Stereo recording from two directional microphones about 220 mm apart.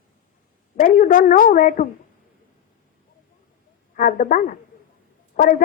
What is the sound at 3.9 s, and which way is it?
A man's voice, 40° left (ahead or behind).